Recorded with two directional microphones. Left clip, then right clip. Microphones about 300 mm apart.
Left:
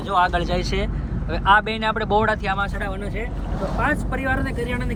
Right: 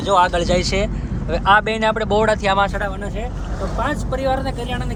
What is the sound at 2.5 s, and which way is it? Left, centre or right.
Speech, right.